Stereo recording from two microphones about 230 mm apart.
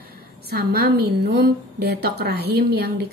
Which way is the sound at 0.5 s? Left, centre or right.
Right.